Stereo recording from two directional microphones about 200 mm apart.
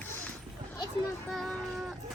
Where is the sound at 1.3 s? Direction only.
Centre (ahead or behind).